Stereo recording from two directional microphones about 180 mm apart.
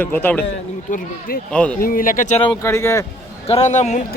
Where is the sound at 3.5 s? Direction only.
40° left (ahead or behind).